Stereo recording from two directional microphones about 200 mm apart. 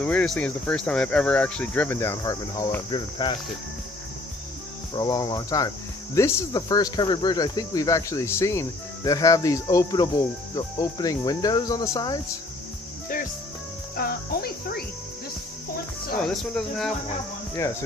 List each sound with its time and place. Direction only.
0.0 s speech: 5° left (ahead or behind); by 3.3 s 25° left (ahead or behind)
4.9 s cricket: 20° left (ahead or behind)
6.1 s speech: 15° left (ahead or behind)
13.9 s insect: 50° left (ahead or behind)
16.2 s speech: 5° left (ahead or behind)